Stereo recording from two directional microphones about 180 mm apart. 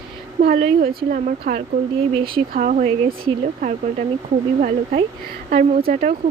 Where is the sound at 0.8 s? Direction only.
55° right (ahead or behind).